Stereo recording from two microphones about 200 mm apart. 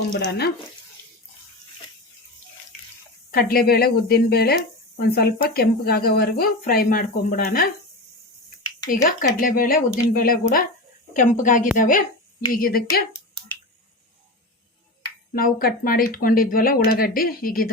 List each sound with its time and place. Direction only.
0.3 s speech: 55° left (ahead or behind)
3.3 s speech: 45° left (ahead or behind)
9.0 s speech: 45° left (ahead or behind)
15.3 s speech: 45° left (ahead or behind)